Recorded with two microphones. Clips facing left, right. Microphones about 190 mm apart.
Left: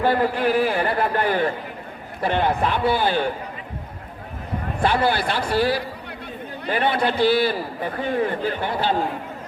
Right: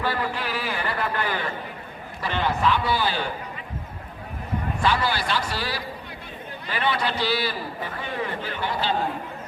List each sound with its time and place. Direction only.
0.0 s speech: 50° left (ahead or behind)
0.9 s speech: 35° left (ahead or behind)
1.1 s a man's voice: 50° left (ahead or behind)
4.8 s a man's voice: 55° left (ahead or behind)